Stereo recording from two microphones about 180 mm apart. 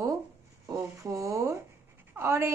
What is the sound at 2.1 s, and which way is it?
Speech, 15° right (ahead or behind).